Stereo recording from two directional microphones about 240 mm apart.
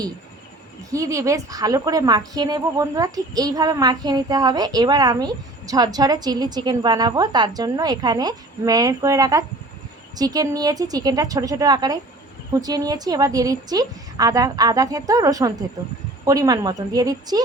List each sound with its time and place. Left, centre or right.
0.9 s a woman's voice: centre